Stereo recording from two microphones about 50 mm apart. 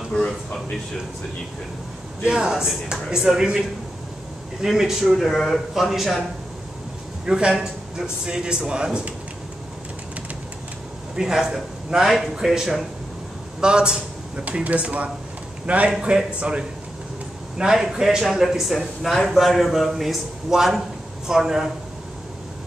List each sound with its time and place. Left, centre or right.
2.2 s a man's voice: centre
7.2 s a man's voice: centre
11.1 s a man's voice: centre
13.6 s a man's voice: centre
17.6 s a man's voice: centre